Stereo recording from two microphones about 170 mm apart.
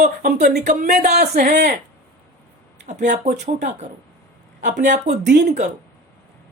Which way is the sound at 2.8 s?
45° right (ahead or behind).